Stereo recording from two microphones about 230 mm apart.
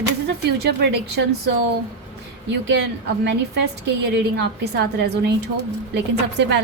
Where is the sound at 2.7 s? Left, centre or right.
Right.